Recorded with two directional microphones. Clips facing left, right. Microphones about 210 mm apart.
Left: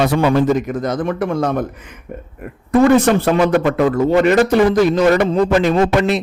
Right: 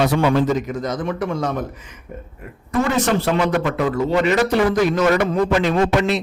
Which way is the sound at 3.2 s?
50° left (ahead or behind).